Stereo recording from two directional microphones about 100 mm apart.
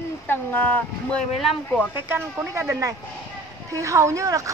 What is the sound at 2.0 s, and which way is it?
Speech, 25° right (ahead or behind).